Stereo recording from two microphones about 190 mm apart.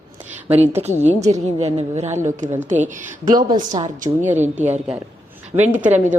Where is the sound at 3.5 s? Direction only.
20° right (ahead or behind).